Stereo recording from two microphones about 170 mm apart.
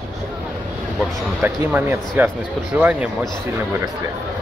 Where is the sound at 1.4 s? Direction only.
10° right (ahead or behind).